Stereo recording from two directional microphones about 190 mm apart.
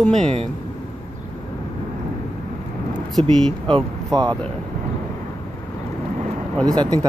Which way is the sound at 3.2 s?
30° right (ahead or behind).